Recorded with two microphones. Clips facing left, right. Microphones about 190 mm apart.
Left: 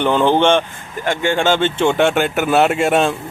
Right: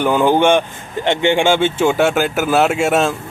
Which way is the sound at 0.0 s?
10° right (ahead or behind).